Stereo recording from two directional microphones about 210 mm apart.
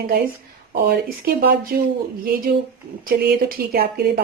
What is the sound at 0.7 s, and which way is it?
A woman's voice, 45° right (ahead or behind).